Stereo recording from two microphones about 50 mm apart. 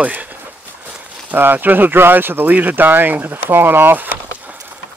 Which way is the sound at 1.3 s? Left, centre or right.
Right.